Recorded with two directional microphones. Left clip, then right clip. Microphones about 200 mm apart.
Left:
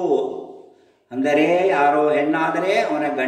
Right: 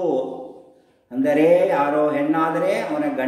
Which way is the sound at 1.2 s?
20° right (ahead or behind).